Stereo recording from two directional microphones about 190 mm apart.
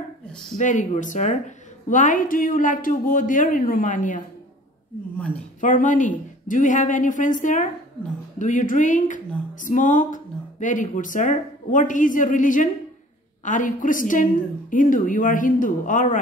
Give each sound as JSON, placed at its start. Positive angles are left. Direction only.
{"t": 0.6, "sound": "speech", "side_deg": 40}
{"t": 5.6, "sound": "speech", "side_deg": 40}